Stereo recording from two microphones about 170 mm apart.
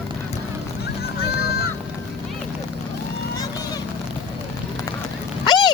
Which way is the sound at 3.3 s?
20° left (ahead or behind).